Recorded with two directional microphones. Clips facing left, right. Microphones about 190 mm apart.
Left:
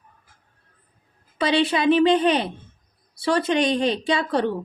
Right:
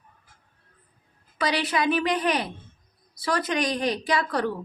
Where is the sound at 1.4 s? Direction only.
25° left (ahead or behind).